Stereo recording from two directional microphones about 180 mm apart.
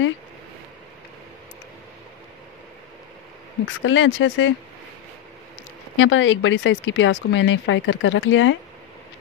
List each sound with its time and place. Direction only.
3.8 s speech: 90° left
5.9 s speech: 90° left